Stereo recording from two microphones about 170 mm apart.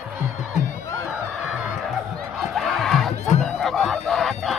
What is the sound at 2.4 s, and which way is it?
Crowd, centre (ahead or behind).